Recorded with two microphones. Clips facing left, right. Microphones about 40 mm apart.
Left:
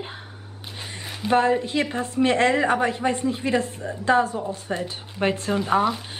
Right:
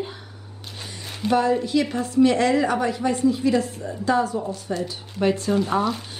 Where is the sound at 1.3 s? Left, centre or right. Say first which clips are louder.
Even; left.